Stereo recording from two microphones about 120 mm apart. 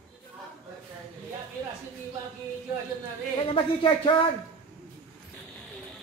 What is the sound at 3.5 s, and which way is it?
Speech, 45° left (ahead or behind).